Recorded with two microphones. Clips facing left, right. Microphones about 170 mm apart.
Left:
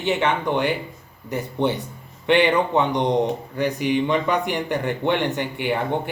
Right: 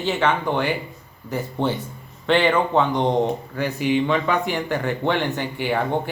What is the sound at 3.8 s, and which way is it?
Speech, 55° left (ahead or behind).